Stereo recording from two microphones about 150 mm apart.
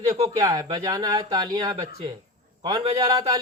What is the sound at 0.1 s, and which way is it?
A man's voice, 20° right (ahead or behind).